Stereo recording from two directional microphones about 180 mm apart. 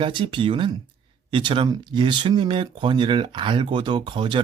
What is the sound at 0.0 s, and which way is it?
Speech, 30° right (ahead or behind).